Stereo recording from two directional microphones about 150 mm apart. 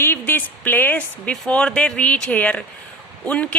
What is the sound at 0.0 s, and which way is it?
A woman's voice, 15° left (ahead or behind).